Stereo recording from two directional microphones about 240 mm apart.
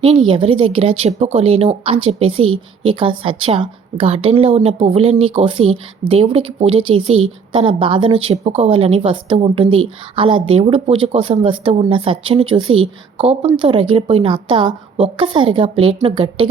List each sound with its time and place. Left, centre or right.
0.3 s a woman's voice: right